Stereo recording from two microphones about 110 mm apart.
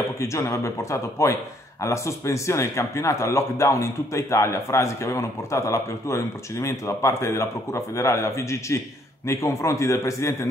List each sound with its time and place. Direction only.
0.2 s a man's voice: 25° left (ahead or behind)